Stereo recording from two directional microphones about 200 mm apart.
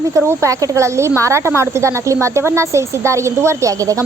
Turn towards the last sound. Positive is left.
turn(degrees=-15)  # may be behind; listen again after turning